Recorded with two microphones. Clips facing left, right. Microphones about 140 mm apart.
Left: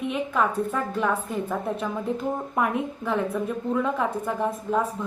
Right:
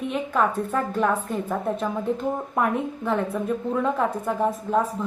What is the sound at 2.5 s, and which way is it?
A woman's voice, centre (ahead or behind).